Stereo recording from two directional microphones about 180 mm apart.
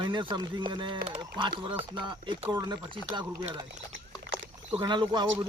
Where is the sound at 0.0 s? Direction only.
25° right (ahead or behind).